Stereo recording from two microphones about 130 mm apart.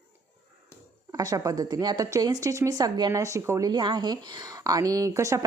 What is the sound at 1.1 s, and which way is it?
A woman's voice, 30° right (ahead or behind).